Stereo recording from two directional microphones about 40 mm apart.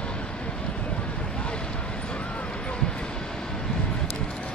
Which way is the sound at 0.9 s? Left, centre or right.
Left.